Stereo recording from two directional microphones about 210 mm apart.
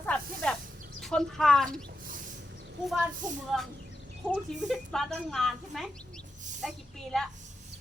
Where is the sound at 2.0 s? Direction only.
40° right (ahead or behind).